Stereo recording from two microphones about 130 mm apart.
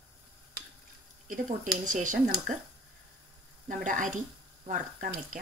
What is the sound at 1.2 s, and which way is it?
Speech, 85° right.